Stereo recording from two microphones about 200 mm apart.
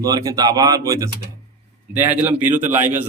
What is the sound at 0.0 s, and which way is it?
Speech, 15° right (ahead or behind).